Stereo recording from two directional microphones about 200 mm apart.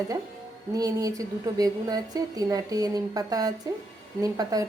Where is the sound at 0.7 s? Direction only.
15° right (ahead or behind).